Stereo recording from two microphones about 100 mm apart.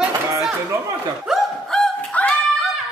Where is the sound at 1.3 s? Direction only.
5° right (ahead or behind).